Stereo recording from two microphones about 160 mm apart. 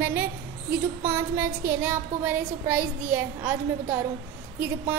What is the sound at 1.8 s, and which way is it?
A woman's voice, 10° right (ahead or behind).